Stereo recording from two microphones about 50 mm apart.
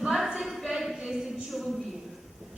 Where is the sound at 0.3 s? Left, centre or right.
Centre.